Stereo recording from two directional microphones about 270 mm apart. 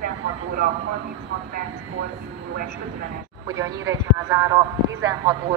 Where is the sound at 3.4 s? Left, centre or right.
Centre.